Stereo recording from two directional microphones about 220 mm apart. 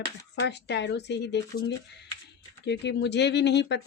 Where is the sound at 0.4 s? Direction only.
50° left (ahead or behind).